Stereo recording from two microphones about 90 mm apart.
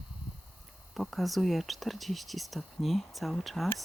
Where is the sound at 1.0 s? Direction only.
Centre (ahead or behind).